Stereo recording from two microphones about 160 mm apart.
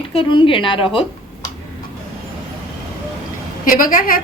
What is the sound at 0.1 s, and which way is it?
Speech, 30° left (ahead or behind).